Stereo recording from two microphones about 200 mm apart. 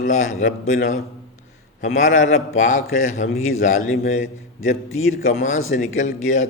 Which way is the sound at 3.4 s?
85° left.